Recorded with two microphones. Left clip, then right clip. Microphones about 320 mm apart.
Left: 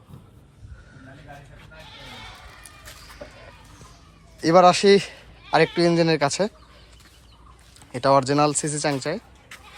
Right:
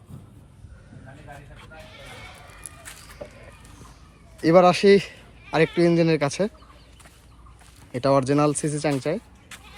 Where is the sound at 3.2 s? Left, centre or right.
Right.